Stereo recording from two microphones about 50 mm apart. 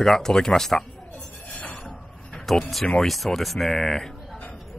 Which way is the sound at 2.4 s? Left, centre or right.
Centre.